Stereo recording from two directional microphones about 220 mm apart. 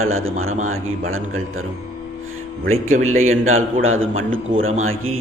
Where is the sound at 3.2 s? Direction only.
70° right (ahead or behind).